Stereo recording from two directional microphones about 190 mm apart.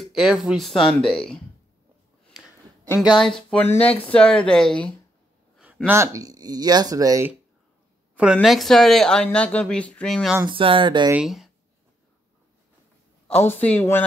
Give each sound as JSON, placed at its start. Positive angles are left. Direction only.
{"t": 0.0, "sound": "speech", "side_deg": -5}
{"t": 3.0, "sound": "speech", "side_deg": 0}
{"t": 5.9, "sound": "speech", "side_deg": -15}
{"t": 8.2, "sound": "speech", "side_deg": -5}
{"t": 10.4, "sound": "speech", "side_deg": -25}
{"t": 11.1, "sound": "speech", "side_deg": 0}
{"t": 13.3, "sound": "speech", "side_deg": 10}